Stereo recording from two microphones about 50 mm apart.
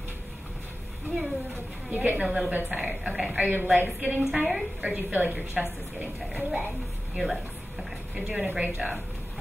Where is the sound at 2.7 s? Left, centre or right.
Right.